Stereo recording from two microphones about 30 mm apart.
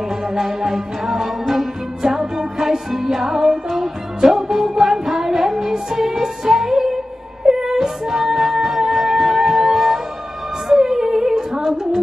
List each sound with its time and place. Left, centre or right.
0.6 s music: centre
11.1 s humming: centre
11.5 s music: centre